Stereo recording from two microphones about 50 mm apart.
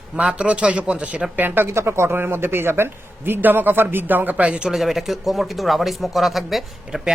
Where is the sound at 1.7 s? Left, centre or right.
Right.